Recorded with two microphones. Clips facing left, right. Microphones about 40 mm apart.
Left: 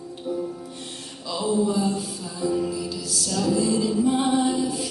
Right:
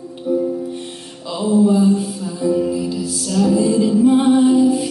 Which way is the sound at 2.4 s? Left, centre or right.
Centre.